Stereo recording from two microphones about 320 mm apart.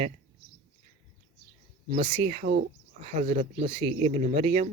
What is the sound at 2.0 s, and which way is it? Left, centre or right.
Speech, centre.